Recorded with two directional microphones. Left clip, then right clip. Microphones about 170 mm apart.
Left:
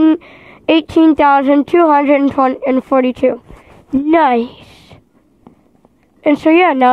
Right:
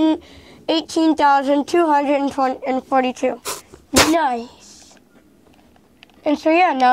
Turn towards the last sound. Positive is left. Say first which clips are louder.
# left 5 dB
turn(degrees=35)  # may be behind; listen again after turning